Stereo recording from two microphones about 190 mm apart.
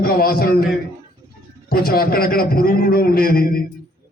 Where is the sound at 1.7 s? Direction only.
50° left (ahead or behind).